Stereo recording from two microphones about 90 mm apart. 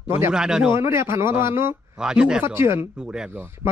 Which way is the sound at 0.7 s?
30° right (ahead or behind).